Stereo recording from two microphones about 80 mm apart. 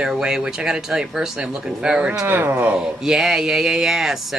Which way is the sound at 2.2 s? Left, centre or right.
Right.